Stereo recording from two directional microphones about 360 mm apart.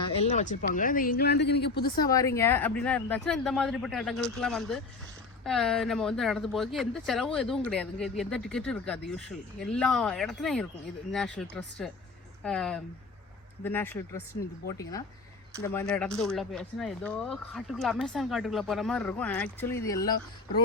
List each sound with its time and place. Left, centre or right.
0.0 s speech: centre
2.0 s speech: centre